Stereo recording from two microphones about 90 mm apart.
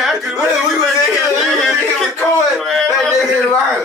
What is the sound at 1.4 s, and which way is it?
Speech, centre (ahead or behind).